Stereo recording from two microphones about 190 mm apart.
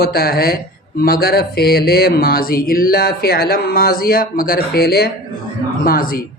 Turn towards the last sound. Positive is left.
turn(degrees=50)  # may be behind; listen again after turning